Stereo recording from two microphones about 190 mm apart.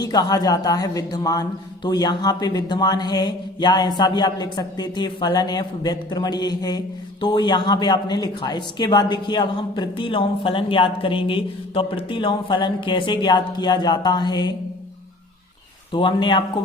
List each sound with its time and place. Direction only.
0.0 s a man's voice: 20° left (ahead or behind)
15.9 s a man's voice: 25° left (ahead or behind)